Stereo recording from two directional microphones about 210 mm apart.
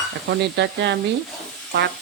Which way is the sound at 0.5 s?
55° right (ahead or behind).